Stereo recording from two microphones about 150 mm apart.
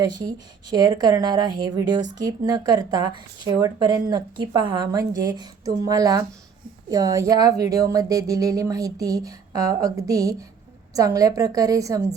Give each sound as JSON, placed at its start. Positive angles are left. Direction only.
{"t": 0.2, "sound": "speech", "side_deg": -25}